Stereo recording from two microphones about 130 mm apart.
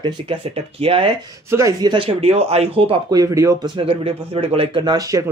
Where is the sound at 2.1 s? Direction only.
50° right (ahead or behind).